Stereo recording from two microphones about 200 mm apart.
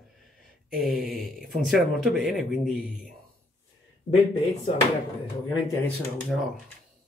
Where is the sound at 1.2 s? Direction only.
Centre (ahead or behind).